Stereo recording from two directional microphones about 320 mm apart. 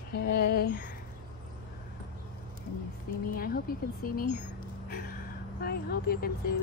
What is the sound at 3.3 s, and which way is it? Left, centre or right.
Speech, left.